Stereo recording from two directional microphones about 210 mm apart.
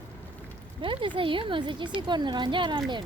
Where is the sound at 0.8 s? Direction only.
25° right (ahead or behind).